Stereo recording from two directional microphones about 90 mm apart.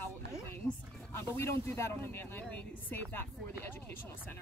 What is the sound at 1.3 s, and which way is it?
Speech, 30° left (ahead or behind).